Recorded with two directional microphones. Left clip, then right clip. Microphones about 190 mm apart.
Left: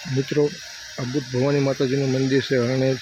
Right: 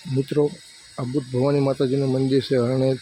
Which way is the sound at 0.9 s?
Centre (ahead or behind).